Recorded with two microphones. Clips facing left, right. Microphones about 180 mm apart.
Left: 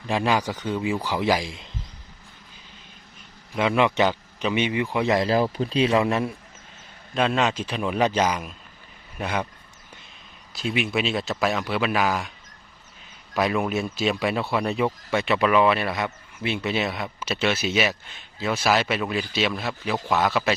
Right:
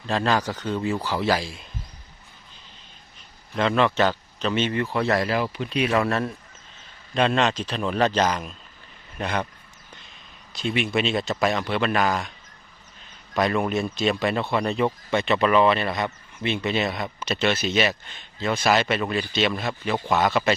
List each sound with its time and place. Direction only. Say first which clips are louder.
0.0 s a man's voice: even; 10° left (ahead or behind)
3.5 s a man's voice: even; 10° left (ahead or behind)
5.3 s speech: left 3 dB; 35° left (ahead or behind); by 6.3 s 15° left (ahead or behind)
7.1 s a man's voice: right 1 dB; 5° left (ahead or behind)
10.5 s speech: right 1 dB; centre (ahead or behind)
13.3 s speech: right 1 dB; 5° left (ahead or behind)